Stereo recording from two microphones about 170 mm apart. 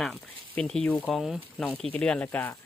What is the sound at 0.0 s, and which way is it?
Speech, 5° left (ahead or behind).